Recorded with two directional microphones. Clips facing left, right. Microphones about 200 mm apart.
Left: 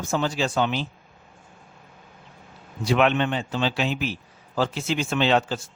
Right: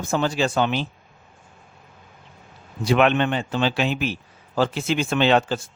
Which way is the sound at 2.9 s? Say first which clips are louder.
Right 2 dB; 60° right (ahead or behind).